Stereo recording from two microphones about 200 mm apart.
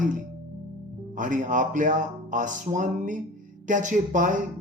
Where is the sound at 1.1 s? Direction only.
40° right (ahead or behind).